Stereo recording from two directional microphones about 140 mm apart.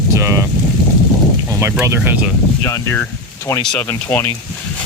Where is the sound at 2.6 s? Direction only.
20° left (ahead or behind).